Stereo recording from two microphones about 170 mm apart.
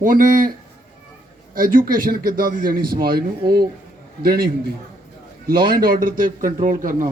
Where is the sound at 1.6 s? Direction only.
55° right (ahead or behind).